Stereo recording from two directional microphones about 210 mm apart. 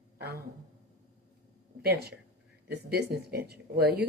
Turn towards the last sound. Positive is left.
turn(degrees=-50)  # may be behind; listen again after turning